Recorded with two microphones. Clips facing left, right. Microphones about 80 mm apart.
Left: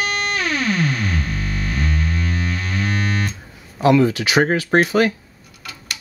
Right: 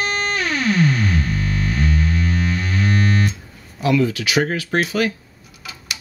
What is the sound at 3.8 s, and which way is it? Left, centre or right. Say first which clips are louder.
Speech: left 4 dB; left.